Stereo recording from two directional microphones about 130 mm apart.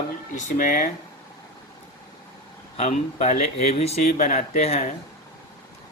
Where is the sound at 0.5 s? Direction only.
75° left (ahead or behind).